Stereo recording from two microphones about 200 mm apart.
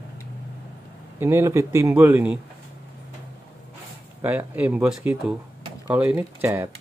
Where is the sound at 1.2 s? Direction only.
15° right (ahead or behind).